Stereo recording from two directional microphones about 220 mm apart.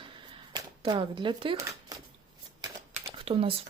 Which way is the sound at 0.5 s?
20° right (ahead or behind).